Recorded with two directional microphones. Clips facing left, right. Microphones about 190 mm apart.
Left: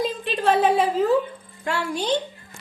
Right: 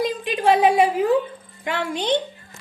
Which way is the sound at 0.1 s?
15° right (ahead or behind).